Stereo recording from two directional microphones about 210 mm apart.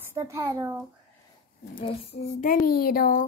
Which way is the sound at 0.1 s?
15° right (ahead or behind).